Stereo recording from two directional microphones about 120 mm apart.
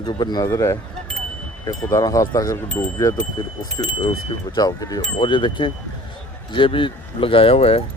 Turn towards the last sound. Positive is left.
turn(degrees=55)  # may be behind; listen again after turning